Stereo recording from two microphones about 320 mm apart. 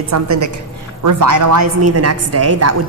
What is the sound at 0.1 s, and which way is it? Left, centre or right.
A woman's voice, right.